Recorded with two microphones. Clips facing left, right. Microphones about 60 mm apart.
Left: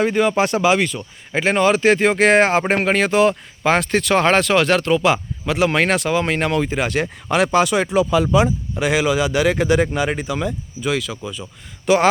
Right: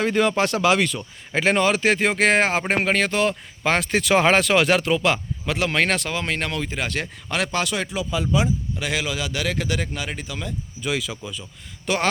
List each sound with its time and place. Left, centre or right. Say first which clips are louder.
0.0 s speech: left 3 dB; centre
3.9 s speech: right 1 dB; centre
8.1 s speech: left 2 dB; left
8.8 s speech: left 12 dB; centre
10.8 s speech: left 3 dB; centre
11.2 s speech: left 5 dB; centre